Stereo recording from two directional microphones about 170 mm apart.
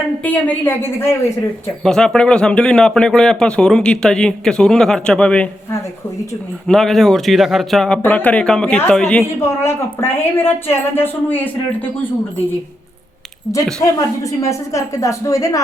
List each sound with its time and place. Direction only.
0.2 s a woman's voice: 10° left (ahead or behind)
6.7 s a woman's voice: centre (ahead or behind)
13.8 s a woman's voice: 20° left (ahead or behind)